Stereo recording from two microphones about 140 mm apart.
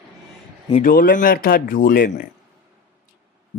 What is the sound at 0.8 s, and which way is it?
Speech, 85° left.